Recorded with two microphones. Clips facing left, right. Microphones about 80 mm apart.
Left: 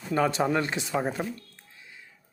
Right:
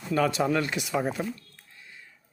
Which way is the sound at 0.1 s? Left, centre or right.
Left.